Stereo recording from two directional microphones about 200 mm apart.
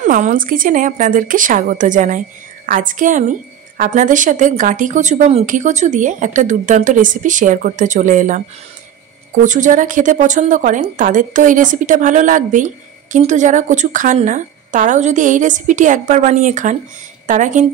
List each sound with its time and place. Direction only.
0.0 s a woman's voice: 40° right (ahead or behind)